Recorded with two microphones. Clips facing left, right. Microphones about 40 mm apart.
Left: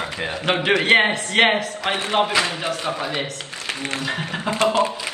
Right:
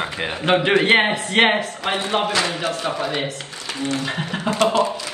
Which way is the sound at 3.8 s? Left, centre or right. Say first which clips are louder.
Right 3 dB; left.